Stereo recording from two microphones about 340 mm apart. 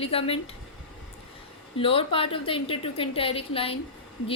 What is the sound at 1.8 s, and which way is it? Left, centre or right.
A woman's voice, centre.